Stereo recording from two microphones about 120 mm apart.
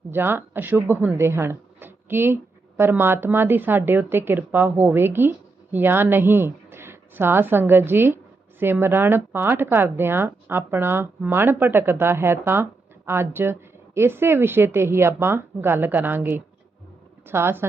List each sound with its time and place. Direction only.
0.1 s a woman's voice: 15° right (ahead or behind)